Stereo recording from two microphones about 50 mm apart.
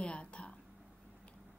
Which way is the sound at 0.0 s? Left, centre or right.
Left.